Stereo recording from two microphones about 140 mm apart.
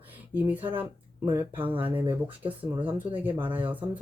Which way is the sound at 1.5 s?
40° right (ahead or behind).